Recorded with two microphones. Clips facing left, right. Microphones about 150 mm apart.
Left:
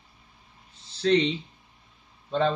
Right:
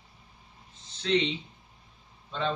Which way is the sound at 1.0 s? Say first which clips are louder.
Left 5 dB; 35° left (ahead or behind).